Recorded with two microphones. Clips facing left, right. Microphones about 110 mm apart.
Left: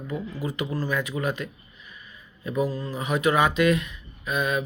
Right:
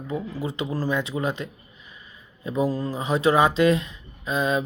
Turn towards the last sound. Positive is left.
turn(degrees=-25)  # may be behind; listen again after turning